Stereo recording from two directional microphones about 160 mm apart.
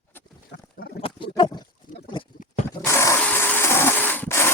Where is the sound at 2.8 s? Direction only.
20° left (ahead or behind).